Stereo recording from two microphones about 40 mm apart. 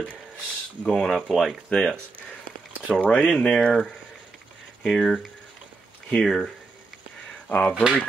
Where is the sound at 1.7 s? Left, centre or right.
Centre.